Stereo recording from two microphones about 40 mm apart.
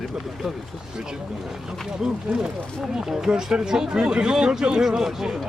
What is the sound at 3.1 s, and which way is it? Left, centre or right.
Speech, centre.